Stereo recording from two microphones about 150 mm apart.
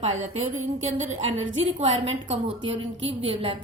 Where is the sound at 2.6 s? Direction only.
40° right (ahead or behind).